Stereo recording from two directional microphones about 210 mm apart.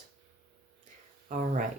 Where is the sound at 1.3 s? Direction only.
40° right (ahead or behind).